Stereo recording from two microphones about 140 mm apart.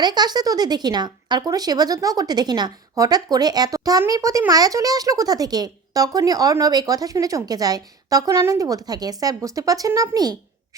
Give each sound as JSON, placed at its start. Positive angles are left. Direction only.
{"t": 0.0, "sound": "speech", "side_deg": -30}